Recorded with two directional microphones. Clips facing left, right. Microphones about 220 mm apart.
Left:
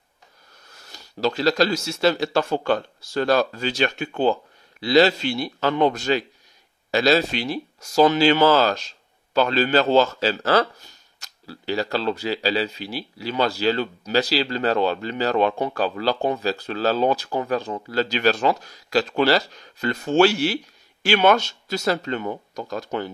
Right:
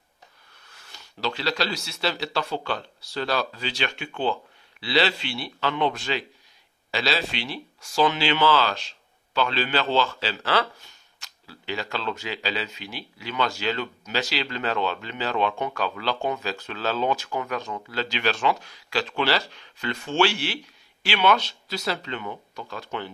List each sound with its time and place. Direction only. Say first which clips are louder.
0.7 s speech: left 8 dB; 40° left (ahead or behind)